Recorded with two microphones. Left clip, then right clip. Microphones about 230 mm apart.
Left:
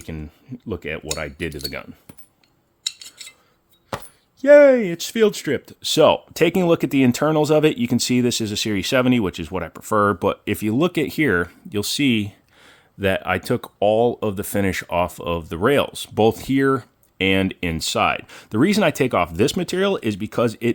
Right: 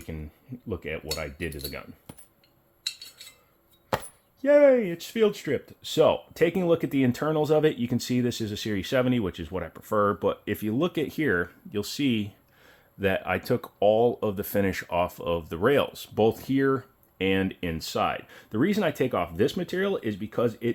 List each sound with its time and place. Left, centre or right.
0.0 s speech: left
2.1 s coin: centre
4.4 s speech: left